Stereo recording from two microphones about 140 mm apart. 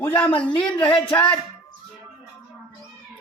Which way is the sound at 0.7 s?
35° left (ahead or behind).